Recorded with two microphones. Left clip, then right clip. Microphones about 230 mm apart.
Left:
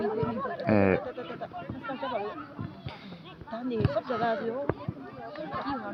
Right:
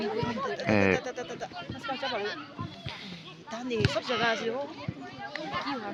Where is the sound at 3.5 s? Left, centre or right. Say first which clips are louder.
Right 1 dB; right.